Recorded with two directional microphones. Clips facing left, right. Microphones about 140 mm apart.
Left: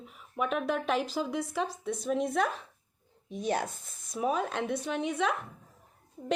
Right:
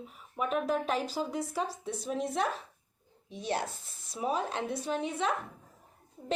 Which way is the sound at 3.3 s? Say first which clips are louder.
Left 3 dB; 45° left (ahead or behind).